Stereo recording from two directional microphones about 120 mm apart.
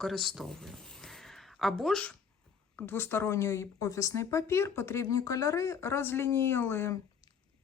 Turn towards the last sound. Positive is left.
turn(degrees=20)  # may be behind; listen again after turning